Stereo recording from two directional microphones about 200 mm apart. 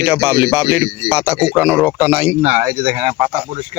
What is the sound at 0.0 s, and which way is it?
Speech, 10° right (ahead or behind).